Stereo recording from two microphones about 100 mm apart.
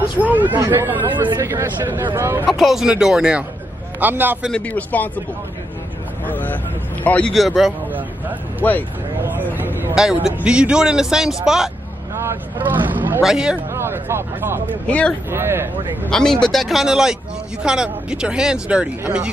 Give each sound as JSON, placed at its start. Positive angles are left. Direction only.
{"t": 0.6, "sound": "speech", "side_deg": -25}
{"t": 2.5, "sound": "speech", "side_deg": -5}
{"t": 4.0, "sound": "speech", "side_deg": -20}
{"t": 4.5, "sound": "speech", "side_deg": 15}
{"t": 6.2, "sound": "speech", "side_deg": 20}
{"t": 7.3, "sound": "speech", "side_deg": 0}
{"t": 9.2, "sound": "vehicle", "side_deg": -20}
{"t": 9.9, "sound": "speech", "side_deg": -5}
{"t": 12.2, "sound": "speech", "side_deg": -25}
{"t": 13.2, "sound": "speech", "side_deg": -5}
{"t": 13.7, "sound": "speech", "side_deg": -25}
{"t": 14.9, "sound": "speech", "side_deg": 15}
{"t": 15.3, "sound": "speech", "side_deg": -25}
{"t": 16.1, "sound": "speech", "side_deg": 5}